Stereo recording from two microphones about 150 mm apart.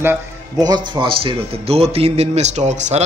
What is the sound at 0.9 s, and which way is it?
Speech, 35° right (ahead or behind).